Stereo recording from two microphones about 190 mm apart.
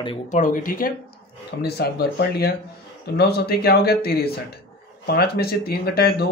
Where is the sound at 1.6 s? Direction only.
60° left (ahead or behind).